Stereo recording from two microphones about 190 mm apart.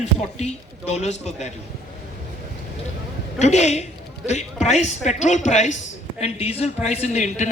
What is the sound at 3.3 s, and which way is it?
A woman's voice, 35° left (ahead or behind).